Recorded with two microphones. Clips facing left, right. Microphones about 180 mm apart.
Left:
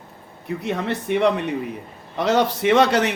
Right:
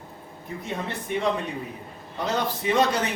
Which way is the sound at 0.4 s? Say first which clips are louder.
Left 7 dB; 75° left (ahead or behind).